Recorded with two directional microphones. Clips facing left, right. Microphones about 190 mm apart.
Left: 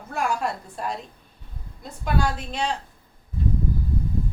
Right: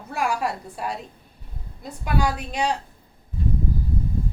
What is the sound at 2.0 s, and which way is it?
Speech, 10° right (ahead or behind).